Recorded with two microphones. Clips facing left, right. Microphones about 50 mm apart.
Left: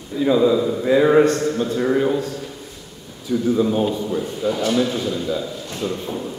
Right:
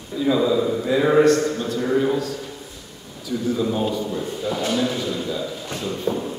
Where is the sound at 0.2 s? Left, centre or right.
Centre.